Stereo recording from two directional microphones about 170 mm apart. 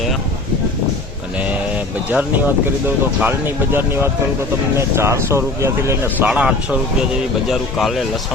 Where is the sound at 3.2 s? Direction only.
10° right (ahead or behind).